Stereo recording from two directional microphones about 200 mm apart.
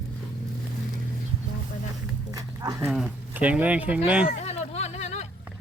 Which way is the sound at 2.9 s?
5° right (ahead or behind).